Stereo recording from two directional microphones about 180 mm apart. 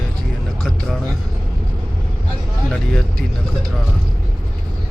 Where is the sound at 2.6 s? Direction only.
5° left (ahead or behind).